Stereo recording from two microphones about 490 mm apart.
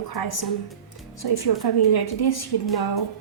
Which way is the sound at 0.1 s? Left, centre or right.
Left.